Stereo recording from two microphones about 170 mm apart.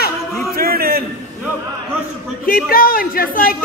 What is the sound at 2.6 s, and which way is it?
Speech, 60° left (ahead or behind).